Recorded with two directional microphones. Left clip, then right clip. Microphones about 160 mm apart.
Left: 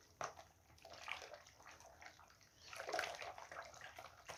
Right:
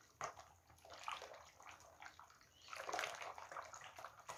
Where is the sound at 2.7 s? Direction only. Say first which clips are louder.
Right 1 dB; centre (ahead or behind).